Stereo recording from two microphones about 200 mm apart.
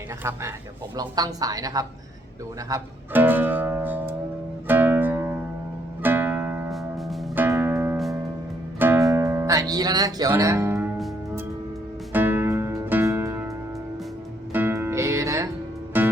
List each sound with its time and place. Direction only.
0.2 s a woman's voice: 15° right (ahead or behind)
2.6 s music: 15° right (ahead or behind)
7.4 s music: 10° right (ahead or behind)
12.1 s music: 10° right (ahead or behind)
14.5 s music: 10° right (ahead or behind)